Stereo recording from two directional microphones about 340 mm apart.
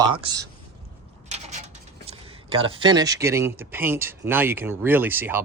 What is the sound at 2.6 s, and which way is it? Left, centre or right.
Speech, centre.